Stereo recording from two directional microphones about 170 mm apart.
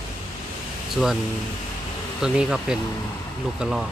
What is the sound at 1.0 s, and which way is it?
Speech, centre (ahead or behind).